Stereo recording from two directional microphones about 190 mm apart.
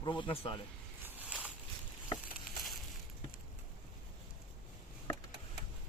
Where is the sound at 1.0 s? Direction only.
5° right (ahead or behind).